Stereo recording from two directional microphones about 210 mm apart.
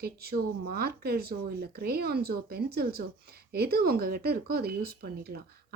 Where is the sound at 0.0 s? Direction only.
50° right (ahead or behind).